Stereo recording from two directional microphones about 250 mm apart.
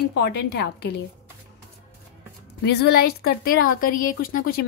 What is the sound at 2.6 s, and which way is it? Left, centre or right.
A woman's voice, left.